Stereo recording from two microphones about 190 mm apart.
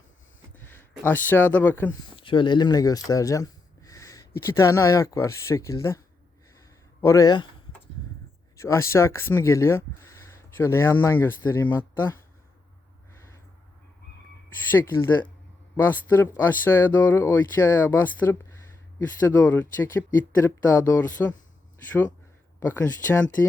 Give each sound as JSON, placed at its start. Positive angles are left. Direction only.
{"t": 0.5, "sound": "a sound", "side_deg": 10}
{"t": 1.0, "sound": "speech", "side_deg": 10}
{"t": 2.1, "sound": "a sound", "side_deg": 25}
{"t": 4.4, "sound": "speech", "side_deg": 15}
{"t": 6.6, "sound": "a sound", "side_deg": 15}
{"t": 8.5, "sound": "speech", "side_deg": 15}
{"t": 13.1, "sound": "crow", "side_deg": 15}
{"t": 14.7, "sound": "speech", "side_deg": 10}
{"t": 22.6, "sound": "speech", "side_deg": 10}